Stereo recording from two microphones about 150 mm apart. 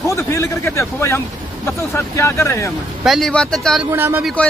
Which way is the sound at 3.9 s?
15° right (ahead or behind).